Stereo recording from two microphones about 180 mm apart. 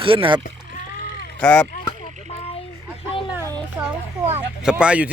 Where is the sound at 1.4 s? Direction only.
5° left (ahead or behind).